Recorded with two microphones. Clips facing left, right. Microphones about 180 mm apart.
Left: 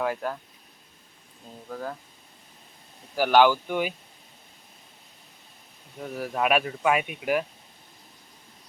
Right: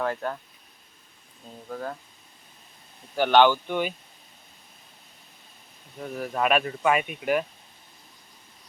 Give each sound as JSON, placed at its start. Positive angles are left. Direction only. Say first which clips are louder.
{"t": 0.0, "sound": "speech", "louder": "even", "side_deg": 5}
{"t": 1.7, "sound": "speech", "louder": "right 1 dB", "side_deg": 0}
{"t": 3.2, "sound": "speech", "louder": "even", "side_deg": 5}
{"t": 6.0, "sound": "speech", "louder": "even", "side_deg": 5}